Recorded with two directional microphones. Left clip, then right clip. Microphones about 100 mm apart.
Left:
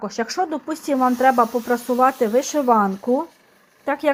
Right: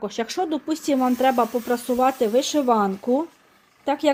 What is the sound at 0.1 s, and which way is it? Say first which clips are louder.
Speech: left 2 dB; 35° right (ahead or behind).